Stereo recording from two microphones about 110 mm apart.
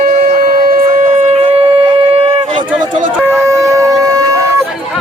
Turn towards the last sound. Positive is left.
turn(degrees=-30)  # may be behind; listen again after turning